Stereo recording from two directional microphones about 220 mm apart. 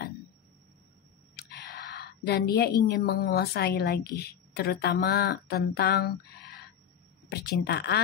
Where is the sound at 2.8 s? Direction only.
45° left (ahead or behind).